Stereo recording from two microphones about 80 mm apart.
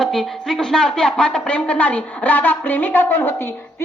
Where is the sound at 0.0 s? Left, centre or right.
Centre.